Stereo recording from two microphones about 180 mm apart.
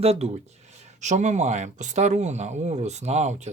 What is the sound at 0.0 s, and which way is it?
Speech, 35° right (ahead or behind).